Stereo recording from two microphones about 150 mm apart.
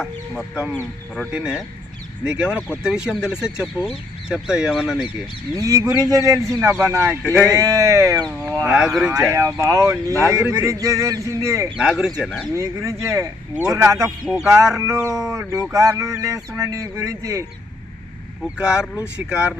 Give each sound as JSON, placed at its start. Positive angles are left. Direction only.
{"t": 0.0, "sound": "speech", "side_deg": -5}
{"t": 5.5, "sound": "speech", "side_deg": -20}
{"t": 7.3, "sound": "speech", "side_deg": 10}
{"t": 7.5, "sound": "speech", "side_deg": -20}
{"t": 8.3, "sound": "speech", "side_deg": 5}
{"t": 8.6, "sound": "speech", "side_deg": -5}
{"t": 9.3, "sound": "speech", "side_deg": -20}
{"t": 10.1, "sound": "speech", "side_deg": 20}
{"t": 10.6, "sound": "speech", "side_deg": -20}
{"t": 11.8, "sound": "speech", "side_deg": -5}
{"t": 12.5, "sound": "speech", "side_deg": -20}
{"t": 18.4, "sound": "speech", "side_deg": -5}